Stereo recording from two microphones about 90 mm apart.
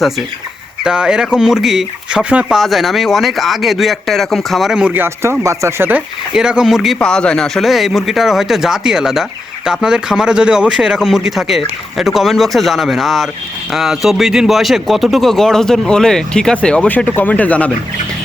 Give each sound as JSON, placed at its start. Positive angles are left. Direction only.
{"t": 0.9, "sound": "speech", "side_deg": -10}
{"t": 2.6, "sound": "speech", "side_deg": 0}
{"t": 4.9, "sound": "speech", "side_deg": -25}
{"t": 6.3, "sound": "speech", "side_deg": -10}
{"t": 7.0, "sound": "speech", "side_deg": 10}